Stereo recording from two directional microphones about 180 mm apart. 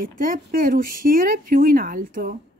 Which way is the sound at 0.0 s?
50° right (ahead or behind).